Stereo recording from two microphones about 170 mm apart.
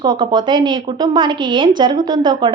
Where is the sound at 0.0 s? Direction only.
25° right (ahead or behind).